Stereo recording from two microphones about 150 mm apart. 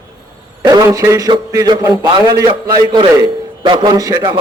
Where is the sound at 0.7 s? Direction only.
25° right (ahead or behind).